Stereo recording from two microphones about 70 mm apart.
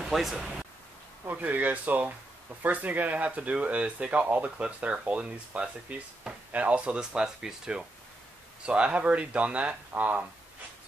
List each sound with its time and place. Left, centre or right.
0.0 s speech: centre
1.3 s speech: right